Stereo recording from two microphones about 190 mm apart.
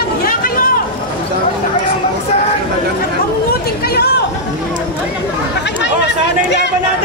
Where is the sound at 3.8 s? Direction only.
55° left (ahead or behind).